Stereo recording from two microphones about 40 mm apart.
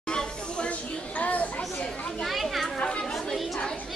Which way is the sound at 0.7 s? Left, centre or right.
Left.